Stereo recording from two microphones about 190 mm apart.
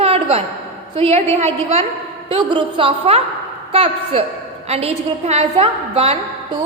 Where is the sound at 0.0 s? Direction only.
30° right (ahead or behind).